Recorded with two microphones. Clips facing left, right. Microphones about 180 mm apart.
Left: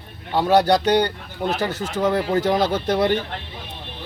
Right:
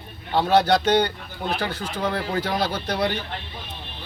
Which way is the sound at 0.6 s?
40° left (ahead or behind).